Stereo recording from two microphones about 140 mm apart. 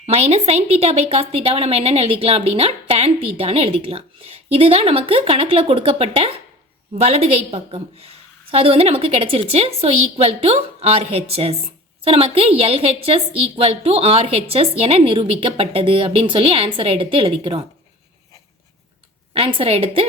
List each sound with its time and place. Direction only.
0.0 s a woman's voice: 50° right (ahead or behind)
19.3 s a woman's voice: 40° right (ahead or behind)